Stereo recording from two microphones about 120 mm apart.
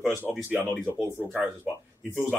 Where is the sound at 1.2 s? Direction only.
15° right (ahead or behind).